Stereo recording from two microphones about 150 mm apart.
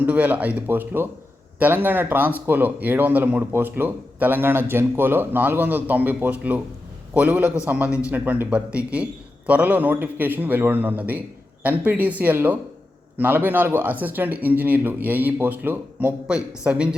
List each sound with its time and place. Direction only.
0.0 s a man's voice: 10° right (ahead or behind)